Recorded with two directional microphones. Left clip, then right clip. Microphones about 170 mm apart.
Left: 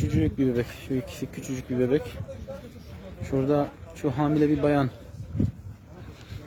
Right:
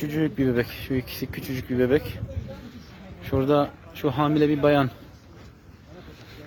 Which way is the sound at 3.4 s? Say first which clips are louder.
Right 4 dB; 5° right (ahead or behind).